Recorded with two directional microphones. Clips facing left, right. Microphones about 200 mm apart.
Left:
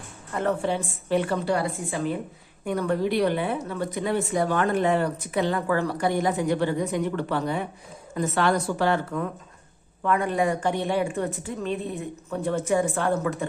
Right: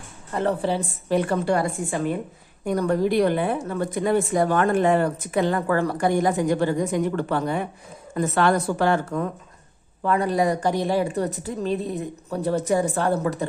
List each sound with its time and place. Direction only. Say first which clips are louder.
0.3 s a woman's voice: right 2 dB; 35° right (ahead or behind)
10.0 s a woman's voice: right 2 dB; 35° right (ahead or behind)